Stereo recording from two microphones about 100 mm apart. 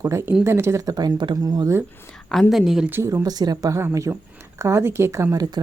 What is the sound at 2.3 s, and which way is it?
Speech, centre (ahead or behind).